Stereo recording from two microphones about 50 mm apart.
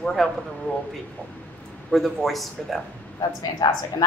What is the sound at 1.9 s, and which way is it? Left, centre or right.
Speech, centre.